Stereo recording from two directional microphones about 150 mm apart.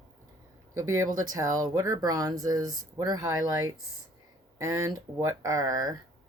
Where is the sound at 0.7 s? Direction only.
20° right (ahead or behind).